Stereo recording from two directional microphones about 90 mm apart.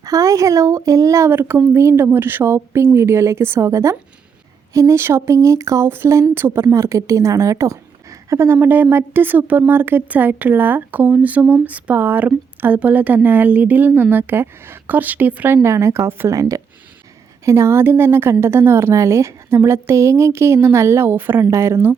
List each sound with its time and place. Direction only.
0.0 s speech: 40° right (ahead or behind)
1.3 s speech: 25° right (ahead or behind)
16.3 s speech: 35° right (ahead or behind)